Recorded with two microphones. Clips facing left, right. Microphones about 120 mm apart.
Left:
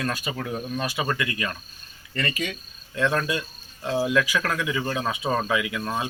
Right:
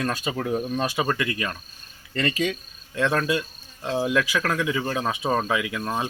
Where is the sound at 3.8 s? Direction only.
20° right (ahead or behind).